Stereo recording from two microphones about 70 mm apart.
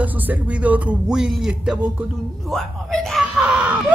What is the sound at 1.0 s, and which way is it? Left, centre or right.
Speech, centre.